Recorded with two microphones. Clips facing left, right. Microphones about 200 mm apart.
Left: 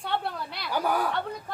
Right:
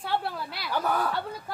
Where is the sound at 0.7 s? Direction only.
10° left (ahead or behind).